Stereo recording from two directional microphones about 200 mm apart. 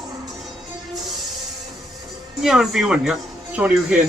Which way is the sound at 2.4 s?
Centre (ahead or behind).